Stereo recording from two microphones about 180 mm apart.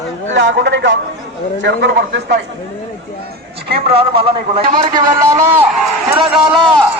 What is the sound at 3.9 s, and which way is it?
Speech, 30° right (ahead or behind).